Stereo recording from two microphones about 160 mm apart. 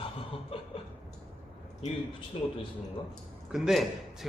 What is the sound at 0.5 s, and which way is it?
Chuckle, 35° left (ahead or behind).